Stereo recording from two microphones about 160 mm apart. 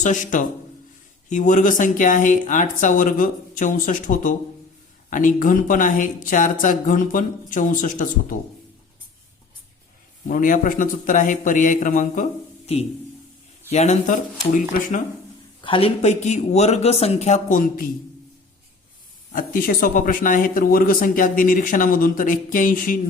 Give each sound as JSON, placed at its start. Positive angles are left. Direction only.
{"t": 0.0, "sound": "speech", "side_deg": 50}
{"t": 10.2, "sound": "speech", "side_deg": 55}
{"t": 15.6, "sound": "speech", "side_deg": 35}
{"t": 19.3, "sound": "speech", "side_deg": 60}